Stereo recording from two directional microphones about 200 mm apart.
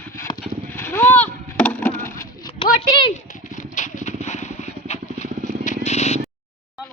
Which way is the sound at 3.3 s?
40° left (ahead or behind).